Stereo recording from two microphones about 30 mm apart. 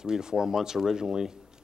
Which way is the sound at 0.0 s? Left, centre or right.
Right.